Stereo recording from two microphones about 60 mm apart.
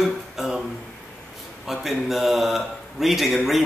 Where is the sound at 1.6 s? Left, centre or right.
Centre.